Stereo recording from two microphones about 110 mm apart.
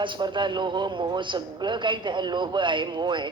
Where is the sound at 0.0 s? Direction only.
45° right (ahead or behind).